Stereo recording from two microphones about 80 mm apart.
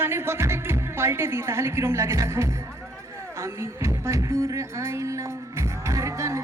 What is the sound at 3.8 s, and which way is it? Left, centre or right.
A woman's voice, right.